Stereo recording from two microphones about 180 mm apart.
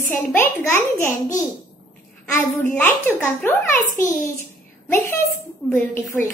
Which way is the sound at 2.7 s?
10° left (ahead or behind).